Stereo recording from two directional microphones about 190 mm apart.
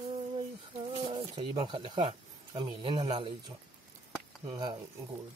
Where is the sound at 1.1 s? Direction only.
25° right (ahead or behind).